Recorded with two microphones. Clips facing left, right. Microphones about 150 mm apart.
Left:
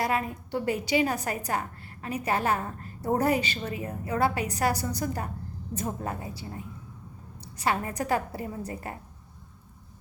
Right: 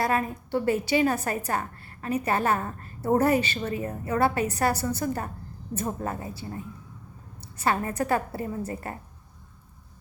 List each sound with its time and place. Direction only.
0.0 s a woman's voice: 15° left (ahead or behind)